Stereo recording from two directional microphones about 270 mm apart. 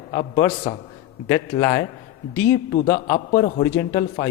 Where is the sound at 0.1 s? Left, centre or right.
Left.